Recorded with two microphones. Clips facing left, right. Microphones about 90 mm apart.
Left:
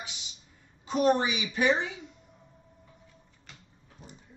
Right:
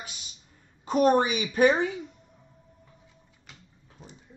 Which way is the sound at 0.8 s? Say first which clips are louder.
Right 3 dB; 45° right (ahead or behind).